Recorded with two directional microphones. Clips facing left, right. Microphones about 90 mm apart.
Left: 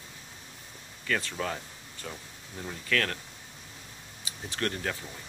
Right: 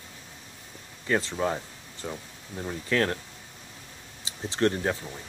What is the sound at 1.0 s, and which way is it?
Speech, 25° right (ahead or behind).